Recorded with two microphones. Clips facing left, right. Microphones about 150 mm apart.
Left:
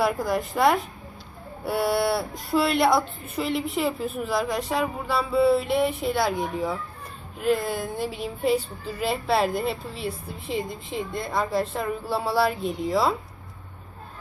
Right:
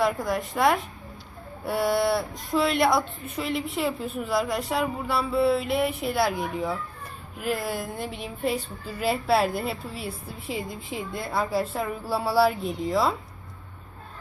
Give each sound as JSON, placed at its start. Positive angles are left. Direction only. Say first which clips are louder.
{"t": 0.0, "sound": "a woman's voice", "louder": "left 1 dB", "side_deg": 0}